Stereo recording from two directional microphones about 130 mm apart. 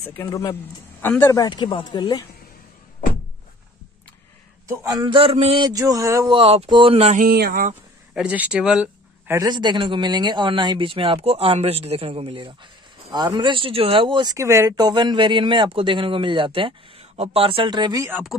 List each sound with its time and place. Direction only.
0.3 s speech: 30° left (ahead or behind)
1.0 s speech: 15° left (ahead or behind)
1.4 s speech: 35° left (ahead or behind)
4.6 s a sound: 30° right (ahead or behind)
5.1 s speech: 50° right (ahead or behind)
5.7 s a sound: 25° right (ahead or behind)
6.3 s speech: 50° right (ahead or behind)
7.2 s speech: 90° right
8.1 s speech: 10° right (ahead or behind)
9.4 s speech: 35° right (ahead or behind)
14.8 s speech: 35° right (ahead or behind)